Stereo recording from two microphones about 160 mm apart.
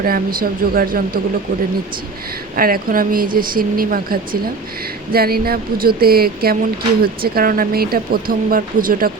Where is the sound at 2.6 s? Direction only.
65° right (ahead or behind).